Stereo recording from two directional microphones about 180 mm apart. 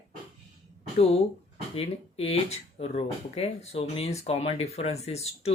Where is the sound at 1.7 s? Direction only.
35° left (ahead or behind).